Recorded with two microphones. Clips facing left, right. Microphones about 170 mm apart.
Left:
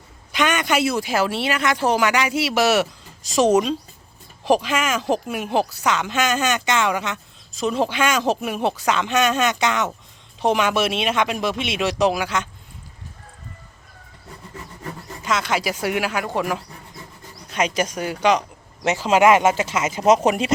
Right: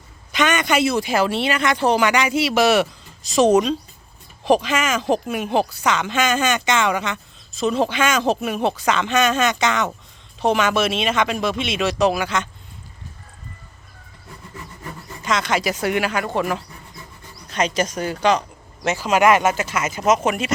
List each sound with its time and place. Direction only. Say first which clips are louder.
0.3 s a woman's voice: right 1 dB; 5° left (ahead or behind)
15.2 s a woman's voice: right 1 dB; 5° left (ahead or behind); by 20.5 s 35° left (ahead or behind)